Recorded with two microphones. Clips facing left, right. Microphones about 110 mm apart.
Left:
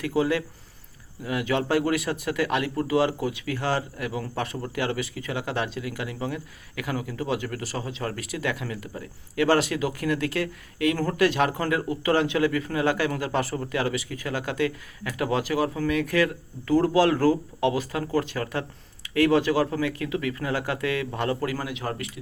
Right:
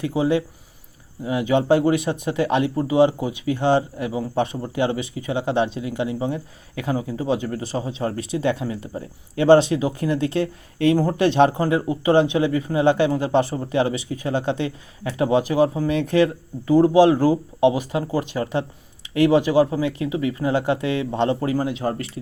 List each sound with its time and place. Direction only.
0.0 s speech: 20° right (ahead or behind)